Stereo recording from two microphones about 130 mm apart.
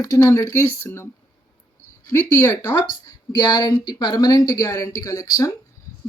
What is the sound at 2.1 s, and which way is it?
Speech, 20° left (ahead or behind).